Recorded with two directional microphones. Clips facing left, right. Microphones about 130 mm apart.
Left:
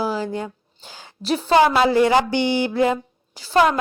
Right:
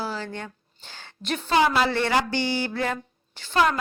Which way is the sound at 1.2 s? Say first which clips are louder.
Left 7 dB; 35° left (ahead or behind).